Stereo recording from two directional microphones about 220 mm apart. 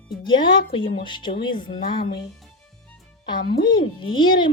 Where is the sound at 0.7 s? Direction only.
25° left (ahead or behind).